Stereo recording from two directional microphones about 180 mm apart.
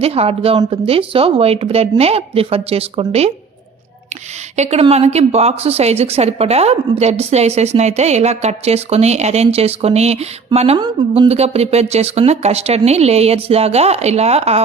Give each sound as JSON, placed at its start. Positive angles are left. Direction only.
{"t": 0.0, "sound": "a woman's voice", "side_deg": -35}
{"t": 4.5, "sound": "a woman's voice", "side_deg": -40}